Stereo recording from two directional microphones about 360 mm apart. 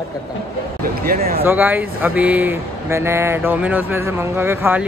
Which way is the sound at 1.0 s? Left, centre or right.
Right.